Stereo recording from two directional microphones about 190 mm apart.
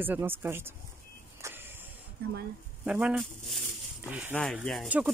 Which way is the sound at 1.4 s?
15° right (ahead or behind).